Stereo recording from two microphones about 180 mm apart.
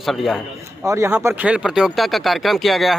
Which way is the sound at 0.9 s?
15° right (ahead or behind).